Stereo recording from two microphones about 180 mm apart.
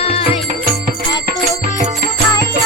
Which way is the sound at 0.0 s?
35° left (ahead or behind).